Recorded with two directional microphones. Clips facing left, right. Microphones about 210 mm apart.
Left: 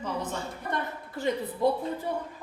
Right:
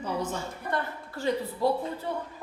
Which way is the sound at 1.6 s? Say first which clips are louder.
Left 1 dB; 20° left (ahead or behind).